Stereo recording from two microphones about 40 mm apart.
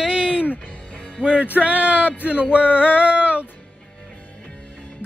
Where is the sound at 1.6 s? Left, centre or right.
Right.